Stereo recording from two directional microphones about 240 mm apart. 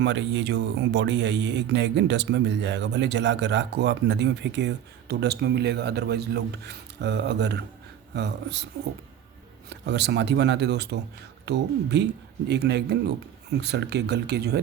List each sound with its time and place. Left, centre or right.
0.0 s speech: right
9.6 s speech: right